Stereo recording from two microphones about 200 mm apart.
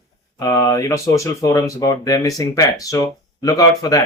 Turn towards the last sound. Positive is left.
turn(degrees=20)  # may be behind; listen again after turning